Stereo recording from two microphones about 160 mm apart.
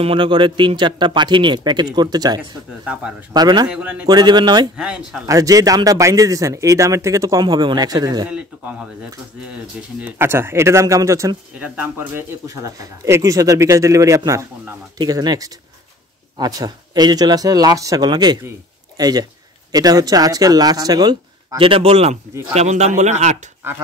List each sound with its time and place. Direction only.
0.0 s speech: 35° right (ahead or behind)
2.8 s speech: 5° right (ahead or behind)
3.3 s speech: 25° right (ahead or behind)
3.6 s speech: 5° right (ahead or behind)
4.1 s speech: 25° right (ahead or behind)
4.7 s speech: 5° right (ahead or behind)
5.2 s speech: 20° right (ahead or behind)
8.3 s speech: 5° right (ahead or behind)
10.0 s a man's voice: 15° right (ahead or behind); by 23.3 s 45° right (ahead or behind)